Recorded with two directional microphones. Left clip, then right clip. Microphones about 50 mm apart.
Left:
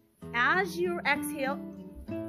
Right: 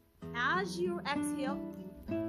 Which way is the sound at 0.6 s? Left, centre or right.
Centre.